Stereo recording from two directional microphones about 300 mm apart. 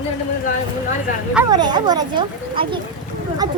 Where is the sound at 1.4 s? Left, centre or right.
Centre.